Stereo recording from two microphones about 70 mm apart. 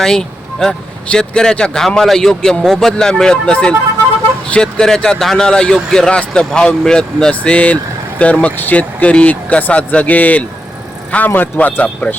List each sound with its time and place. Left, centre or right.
0.0 s speech: centre